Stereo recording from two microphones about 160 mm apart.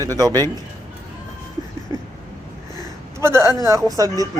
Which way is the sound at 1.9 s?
20° right (ahead or behind).